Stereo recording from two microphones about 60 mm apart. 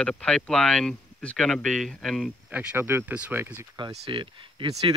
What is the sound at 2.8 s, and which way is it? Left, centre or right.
Speech, right.